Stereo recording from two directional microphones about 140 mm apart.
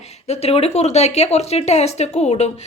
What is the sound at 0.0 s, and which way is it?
Speech, 50° left (ahead or behind).